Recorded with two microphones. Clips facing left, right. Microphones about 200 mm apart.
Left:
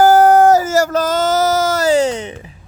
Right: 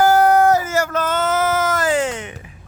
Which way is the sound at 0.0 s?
45° left (ahead or behind).